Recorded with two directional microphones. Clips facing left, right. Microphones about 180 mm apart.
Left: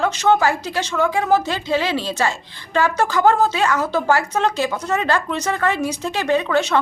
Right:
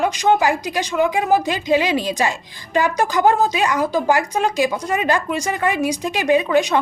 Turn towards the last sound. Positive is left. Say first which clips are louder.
# right 2 dB
turn(degrees=-15)  # may be behind; listen again after turning